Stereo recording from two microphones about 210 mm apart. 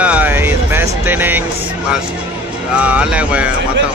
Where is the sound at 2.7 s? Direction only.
5° right (ahead or behind).